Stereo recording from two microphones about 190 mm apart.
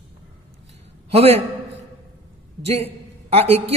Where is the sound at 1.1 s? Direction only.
30° right (ahead or behind).